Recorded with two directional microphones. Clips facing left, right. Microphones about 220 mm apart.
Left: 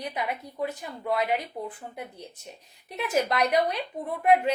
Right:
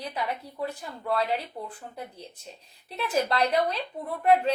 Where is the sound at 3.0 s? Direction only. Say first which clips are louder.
Even; 15° left (ahead or behind).